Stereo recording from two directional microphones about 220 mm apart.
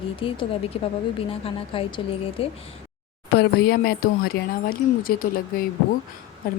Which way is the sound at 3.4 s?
45° left (ahead or behind).